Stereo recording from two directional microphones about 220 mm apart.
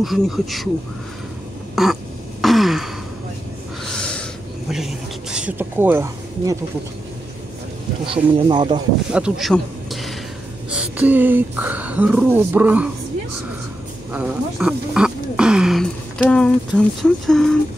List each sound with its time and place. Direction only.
0.0 s speech: centre (ahead or behind)
1.8 s a sound: centre (ahead or behind)
2.4 s throat clearing: centre (ahead or behind)
3.8 s a sound: 5° left (ahead or behind); by 6.6 s 15° right (ahead or behind)
8.0 s speech: 20° right (ahead or behind)
9.1 s speech: centre (ahead or behind)
10.7 s speech: 5° right (ahead or behind)
14.1 s speech: 5° right (ahead or behind)